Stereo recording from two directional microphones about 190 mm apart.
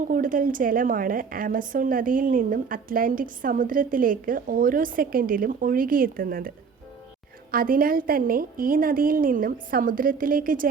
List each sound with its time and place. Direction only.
0.0 s a woman's voice: 45° right (ahead or behind)
7.5 s a woman's voice: 50° right (ahead or behind)